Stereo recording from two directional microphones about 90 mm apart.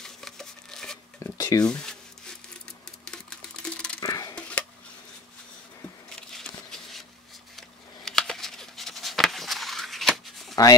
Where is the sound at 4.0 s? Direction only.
45° left (ahead or behind).